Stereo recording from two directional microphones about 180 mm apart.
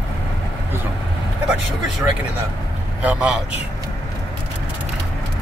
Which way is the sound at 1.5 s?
5° right (ahead or behind).